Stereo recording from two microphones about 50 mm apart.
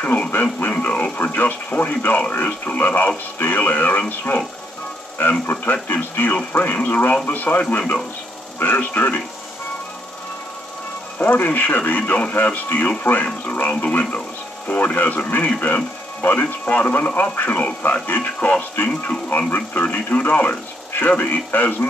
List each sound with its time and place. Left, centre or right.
0.0 s speech: left
5.2 s speech: left
8.5 s speech: left
11.1 s speech: left